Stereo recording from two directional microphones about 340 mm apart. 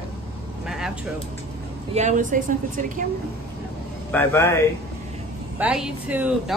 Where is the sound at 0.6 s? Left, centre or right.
Centre.